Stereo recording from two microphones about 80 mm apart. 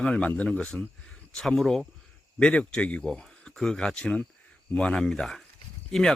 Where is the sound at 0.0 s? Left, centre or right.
Centre.